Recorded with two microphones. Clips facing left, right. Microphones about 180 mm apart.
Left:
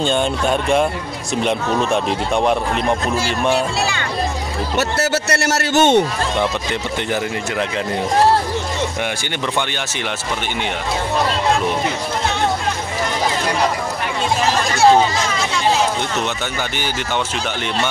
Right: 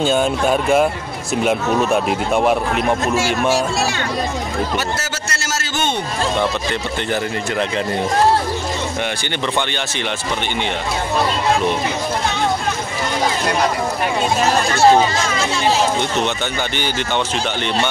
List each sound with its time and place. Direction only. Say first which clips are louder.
0.0 s speech: right 2 dB; 5° right (ahead or behind)
4.7 s a man's voice: left 5 dB; 65° left (ahead or behind)